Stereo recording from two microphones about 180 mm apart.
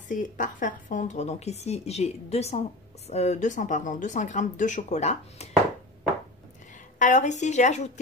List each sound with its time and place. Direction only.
0.1 s a woman's voice: 45° left (ahead or behind)
7.0 s a woman's voice: 45° left (ahead or behind)